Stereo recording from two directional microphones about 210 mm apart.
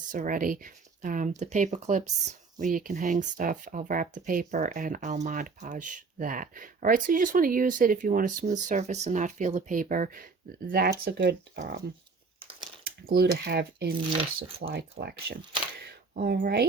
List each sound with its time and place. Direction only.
0.1 s speech: 40° right (ahead or behind)
12.8 s speech: 50° right (ahead or behind)